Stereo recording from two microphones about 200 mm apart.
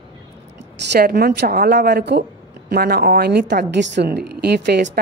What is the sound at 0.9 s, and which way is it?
A woman's voice, 50° right (ahead or behind).